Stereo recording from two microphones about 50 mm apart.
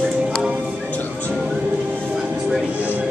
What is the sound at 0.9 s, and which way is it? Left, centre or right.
Music, left.